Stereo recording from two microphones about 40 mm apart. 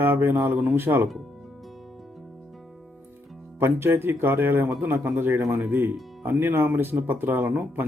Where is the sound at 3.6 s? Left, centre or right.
Right.